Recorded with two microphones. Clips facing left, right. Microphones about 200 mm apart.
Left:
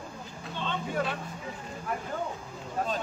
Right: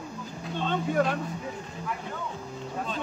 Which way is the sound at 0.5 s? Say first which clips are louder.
Right 6 dB; 50° right (ahead or behind).